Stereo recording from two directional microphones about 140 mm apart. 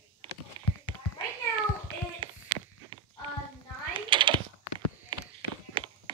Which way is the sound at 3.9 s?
35° right (ahead or behind).